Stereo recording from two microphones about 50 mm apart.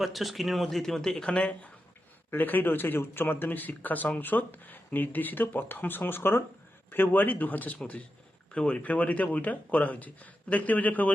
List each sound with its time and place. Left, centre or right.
0.0 s speech: centre
1.4 s speech: left
2.3 s speech: left
8.5 s speech: left